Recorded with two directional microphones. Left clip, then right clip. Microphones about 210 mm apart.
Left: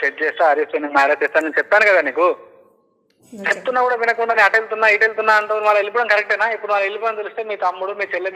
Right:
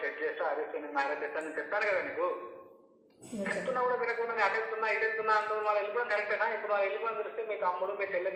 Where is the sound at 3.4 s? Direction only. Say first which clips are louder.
Left 14 dB; 50° left (ahead or behind).